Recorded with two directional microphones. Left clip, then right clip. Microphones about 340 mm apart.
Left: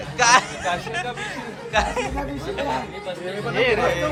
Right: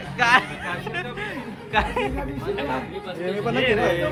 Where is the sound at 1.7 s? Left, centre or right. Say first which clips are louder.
Left 1 dB; centre.